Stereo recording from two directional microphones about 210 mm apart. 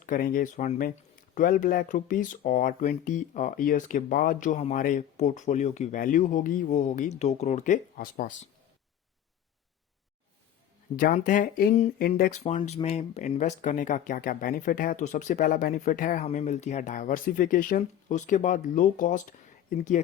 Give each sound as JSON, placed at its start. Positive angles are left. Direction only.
{"t": 0.0, "sound": "speech", "side_deg": 40}
{"t": 10.9, "sound": "speech", "side_deg": 40}
{"t": 12.4, "sound": "speech", "side_deg": 35}